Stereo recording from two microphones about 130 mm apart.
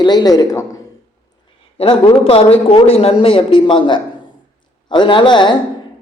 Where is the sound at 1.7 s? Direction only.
45° left (ahead or behind).